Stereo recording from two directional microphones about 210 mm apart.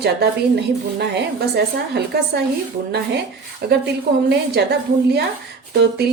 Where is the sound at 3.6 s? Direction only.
45° right (ahead or behind).